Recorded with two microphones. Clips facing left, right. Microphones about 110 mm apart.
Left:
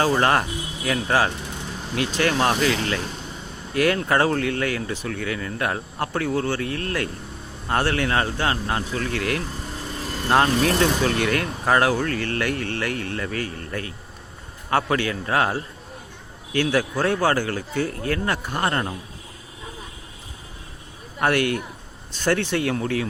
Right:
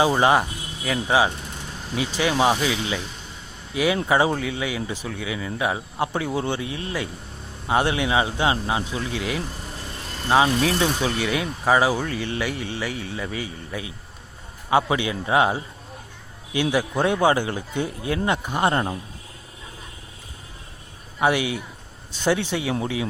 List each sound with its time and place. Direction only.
0.0 s a man's voice: 10° right (ahead or behind)
21.2 s speech: 10° right (ahead or behind)